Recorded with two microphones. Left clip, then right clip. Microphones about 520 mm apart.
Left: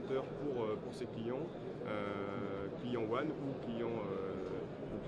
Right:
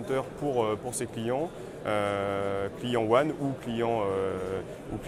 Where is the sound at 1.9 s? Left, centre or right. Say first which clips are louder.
Right 14 dB; right.